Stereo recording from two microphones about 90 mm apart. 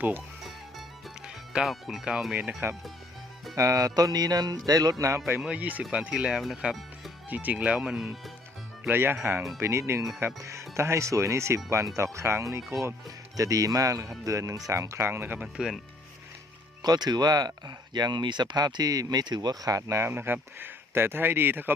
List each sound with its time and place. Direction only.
1.5 s speech: centre (ahead or behind)
3.5 s speech: 35° right (ahead or behind)
5.4 s speech: 15° right (ahead or behind)
8.9 s speech: 25° right (ahead or behind)
15.5 s speech: 5° right (ahead or behind)
16.8 s speech: 50° right (ahead or behind)
20.1 s speech: 25° right (ahead or behind)